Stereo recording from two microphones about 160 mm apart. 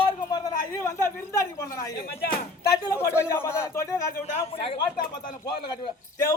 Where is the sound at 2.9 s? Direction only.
15° left (ahead or behind).